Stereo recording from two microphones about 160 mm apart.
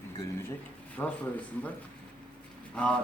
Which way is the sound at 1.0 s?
10° left (ahead or behind).